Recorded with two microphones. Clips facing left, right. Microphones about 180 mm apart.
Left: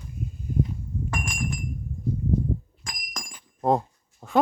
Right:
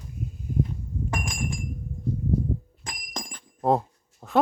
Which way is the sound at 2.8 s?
30° right (ahead or behind).